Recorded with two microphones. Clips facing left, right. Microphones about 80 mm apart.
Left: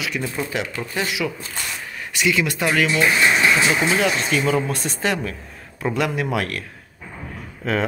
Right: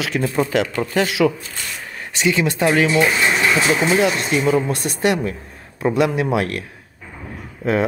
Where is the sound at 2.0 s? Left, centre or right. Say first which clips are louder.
Right 2 dB; right.